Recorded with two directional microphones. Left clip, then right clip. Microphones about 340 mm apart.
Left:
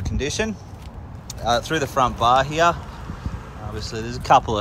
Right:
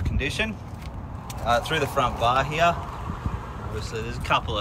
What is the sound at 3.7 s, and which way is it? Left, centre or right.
Speech, centre.